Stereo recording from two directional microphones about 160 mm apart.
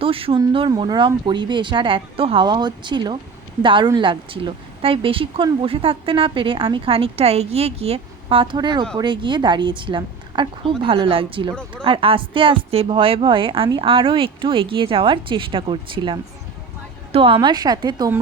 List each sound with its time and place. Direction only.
0.0 s a woman's voice: 35° right (ahead or behind)